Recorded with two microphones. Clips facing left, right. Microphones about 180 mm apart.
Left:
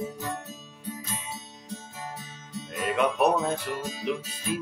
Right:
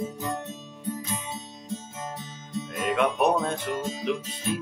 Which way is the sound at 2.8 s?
5° left (ahead or behind).